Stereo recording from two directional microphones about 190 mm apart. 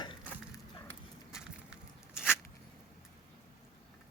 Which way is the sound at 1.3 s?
5° right (ahead or behind).